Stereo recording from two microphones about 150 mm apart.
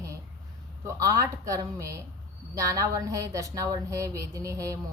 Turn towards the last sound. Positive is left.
turn(degrees=-20)  # may be behind; listen again after turning